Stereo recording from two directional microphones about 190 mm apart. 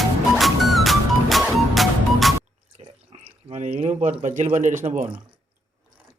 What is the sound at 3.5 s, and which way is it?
A man's voice, 35° right (ahead or behind).